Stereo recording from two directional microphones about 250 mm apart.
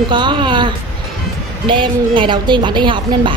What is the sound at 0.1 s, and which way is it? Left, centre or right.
A woman's voice, centre.